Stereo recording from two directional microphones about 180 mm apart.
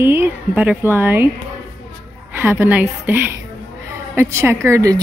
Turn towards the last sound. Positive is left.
turn(degrees=-15)  # may be behind; listen again after turning